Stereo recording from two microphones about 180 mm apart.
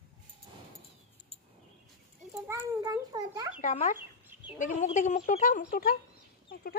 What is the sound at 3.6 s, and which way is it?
Speech, 40° left (ahead or behind).